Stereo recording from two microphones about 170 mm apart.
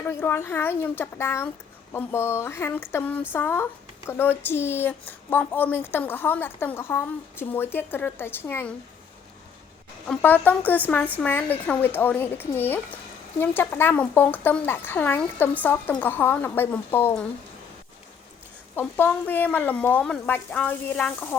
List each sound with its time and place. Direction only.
0.0 s speech: 10° left (ahead or behind)
10.1 s speech: 10° left (ahead or behind)
18.8 s speech: 10° left (ahead or behind)